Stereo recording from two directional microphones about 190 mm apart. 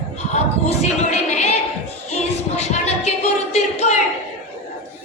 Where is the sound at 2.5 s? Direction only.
35° left (ahead or behind).